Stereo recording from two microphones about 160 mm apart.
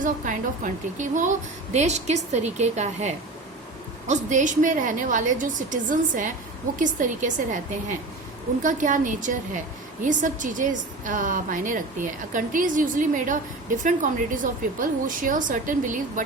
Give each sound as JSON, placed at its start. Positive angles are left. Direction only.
{"t": 0.0, "sound": "a woman's voice", "side_deg": -55}